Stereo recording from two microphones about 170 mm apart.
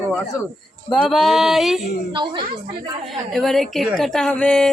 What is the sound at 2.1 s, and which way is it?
Speech, 30° right (ahead or behind).